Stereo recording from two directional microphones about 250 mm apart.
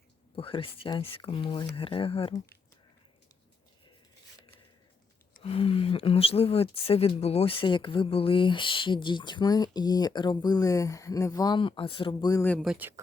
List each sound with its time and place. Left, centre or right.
0.3 s speech: left
5.3 s speech: left; by 12.9 s centre